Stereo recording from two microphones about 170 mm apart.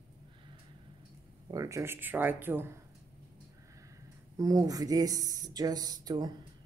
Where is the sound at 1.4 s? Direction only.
20° right (ahead or behind).